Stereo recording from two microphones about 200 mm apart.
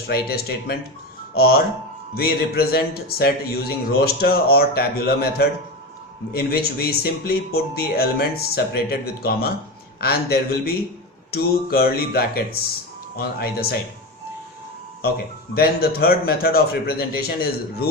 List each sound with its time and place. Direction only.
0.1 s a man's voice: 50° left (ahead or behind)
15.5 s a man's voice: 50° left (ahead or behind)